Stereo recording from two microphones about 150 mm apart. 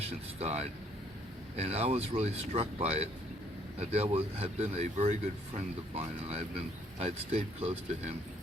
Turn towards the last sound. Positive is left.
turn(degrees=-45)  # may be behind; listen again after turning